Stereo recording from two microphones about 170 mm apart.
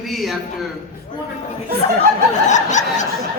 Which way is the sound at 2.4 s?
45° left (ahead or behind).